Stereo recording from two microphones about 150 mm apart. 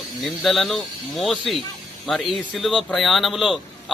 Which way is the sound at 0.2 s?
Centre (ahead or behind).